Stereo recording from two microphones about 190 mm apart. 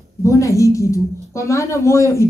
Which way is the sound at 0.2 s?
15° left (ahead or behind).